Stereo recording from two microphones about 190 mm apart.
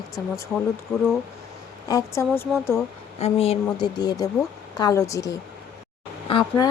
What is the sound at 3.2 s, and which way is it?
Speech, 30° left (ahead or behind).